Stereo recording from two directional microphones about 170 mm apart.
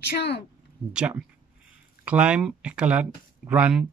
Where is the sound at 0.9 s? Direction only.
5° right (ahead or behind).